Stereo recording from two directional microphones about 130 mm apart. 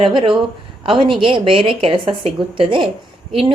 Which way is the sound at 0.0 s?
40° right (ahead or behind).